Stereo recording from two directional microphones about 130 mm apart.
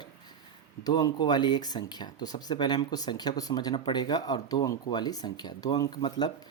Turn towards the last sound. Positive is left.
turn(degrees=30)  # may be behind; listen again after turning